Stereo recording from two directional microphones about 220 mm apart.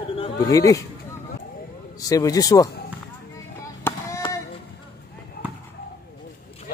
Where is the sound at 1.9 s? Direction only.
15° left (ahead or behind).